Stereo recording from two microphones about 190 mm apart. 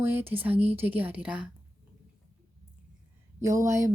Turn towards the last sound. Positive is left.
turn(degrees=-15)  # may be behind; listen again after turning